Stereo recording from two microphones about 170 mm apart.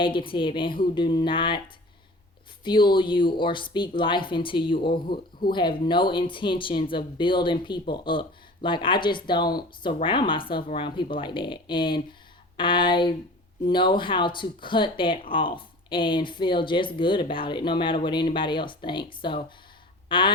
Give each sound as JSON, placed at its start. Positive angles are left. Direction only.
{"t": 0.0, "sound": "speech", "side_deg": 30}
{"t": 20.1, "sound": "goose", "side_deg": 30}